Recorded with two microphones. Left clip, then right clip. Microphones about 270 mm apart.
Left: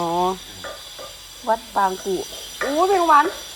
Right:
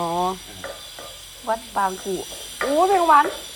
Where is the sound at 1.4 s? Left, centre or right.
Centre.